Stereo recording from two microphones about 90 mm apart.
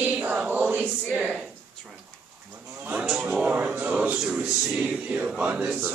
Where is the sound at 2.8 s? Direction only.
10° right (ahead or behind).